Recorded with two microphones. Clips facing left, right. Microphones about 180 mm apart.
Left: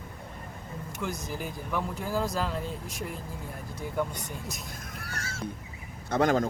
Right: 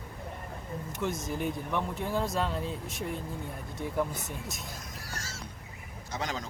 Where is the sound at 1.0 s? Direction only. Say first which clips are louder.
Right 2 dB; centre (ahead or behind).